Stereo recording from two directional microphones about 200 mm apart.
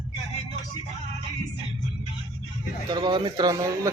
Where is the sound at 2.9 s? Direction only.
20° right (ahead or behind).